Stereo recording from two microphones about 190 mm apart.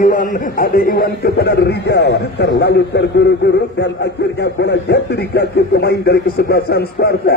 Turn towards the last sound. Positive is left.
turn(degrees=60)  # may be behind; listen again after turning